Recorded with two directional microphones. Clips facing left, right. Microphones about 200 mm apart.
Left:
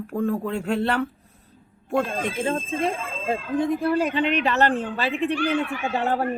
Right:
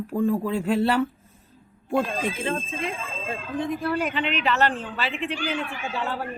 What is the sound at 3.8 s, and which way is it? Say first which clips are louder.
Speech: left 4 dB; 30° left (ahead or behind).